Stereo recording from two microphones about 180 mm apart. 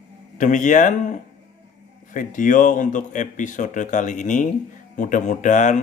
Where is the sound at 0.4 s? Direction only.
45° left (ahead or behind).